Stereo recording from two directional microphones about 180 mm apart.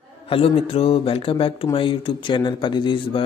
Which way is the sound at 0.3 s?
30° left (ahead or behind).